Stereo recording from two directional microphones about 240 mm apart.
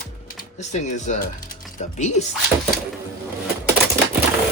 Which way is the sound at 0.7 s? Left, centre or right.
Left.